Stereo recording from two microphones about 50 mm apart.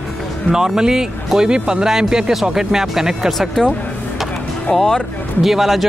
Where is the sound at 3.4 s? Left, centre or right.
Centre.